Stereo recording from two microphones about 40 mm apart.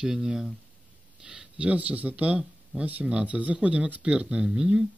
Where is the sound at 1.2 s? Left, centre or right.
Centre.